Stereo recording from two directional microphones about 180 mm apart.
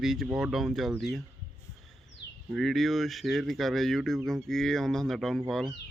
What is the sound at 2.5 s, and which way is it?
Speech, centre (ahead or behind).